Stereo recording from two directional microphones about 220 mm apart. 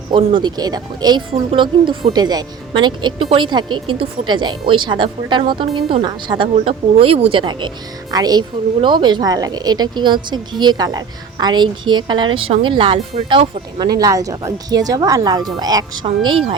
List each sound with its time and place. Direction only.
0.1 s a woman's voice: 20° right (ahead or behind)